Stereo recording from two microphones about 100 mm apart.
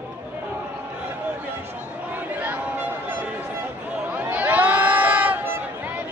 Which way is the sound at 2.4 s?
20° right (ahead or behind).